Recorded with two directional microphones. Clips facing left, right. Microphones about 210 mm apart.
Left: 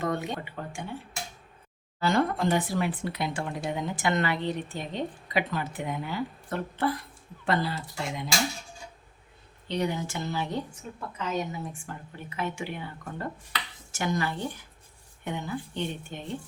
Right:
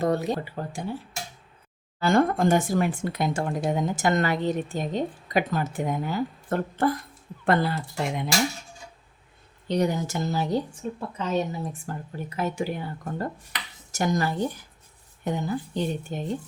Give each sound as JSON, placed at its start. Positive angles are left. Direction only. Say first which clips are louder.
{"t": 0.0, "sound": "a woman's voice", "louder": "right 6 dB", "side_deg": -35}
{"t": 2.0, "sound": "speech", "louder": "right 4 dB", "side_deg": -50}
{"t": 9.6, "sound": "a woman's voice", "louder": "right 5 dB", "side_deg": -45}